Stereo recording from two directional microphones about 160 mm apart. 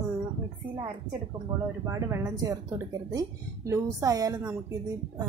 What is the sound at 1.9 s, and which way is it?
A woman's voice, 20° right (ahead or behind).